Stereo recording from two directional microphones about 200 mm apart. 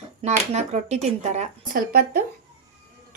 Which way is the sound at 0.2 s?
35° right (ahead or behind).